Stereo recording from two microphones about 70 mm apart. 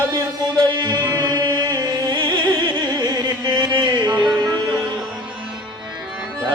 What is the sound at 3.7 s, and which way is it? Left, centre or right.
Music, right.